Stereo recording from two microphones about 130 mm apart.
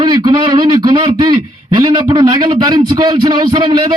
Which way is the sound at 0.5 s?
35° right (ahead or behind).